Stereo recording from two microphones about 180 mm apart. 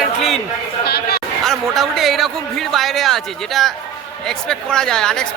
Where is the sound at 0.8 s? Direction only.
60° left (ahead or behind).